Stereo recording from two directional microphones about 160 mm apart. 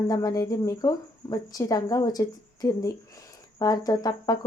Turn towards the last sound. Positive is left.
turn(degrees=25)  # may be behind; listen again after turning